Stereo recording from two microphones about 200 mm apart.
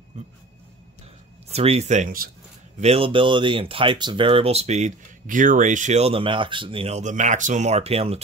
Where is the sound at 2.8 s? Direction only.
30° right (ahead or behind).